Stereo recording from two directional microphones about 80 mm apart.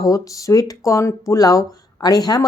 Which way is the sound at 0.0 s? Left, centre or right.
Left.